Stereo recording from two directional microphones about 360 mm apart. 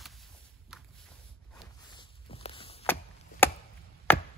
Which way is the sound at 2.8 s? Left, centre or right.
Centre.